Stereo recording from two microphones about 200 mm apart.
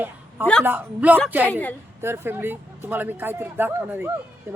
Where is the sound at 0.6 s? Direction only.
10° right (ahead or behind).